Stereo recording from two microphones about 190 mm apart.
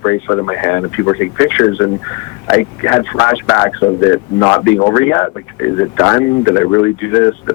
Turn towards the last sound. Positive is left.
turn(degrees=15)  # may be behind; listen again after turning